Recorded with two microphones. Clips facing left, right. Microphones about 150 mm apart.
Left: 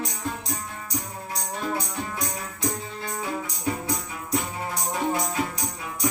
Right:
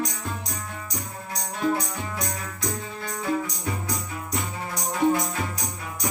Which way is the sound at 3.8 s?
30° left (ahead or behind).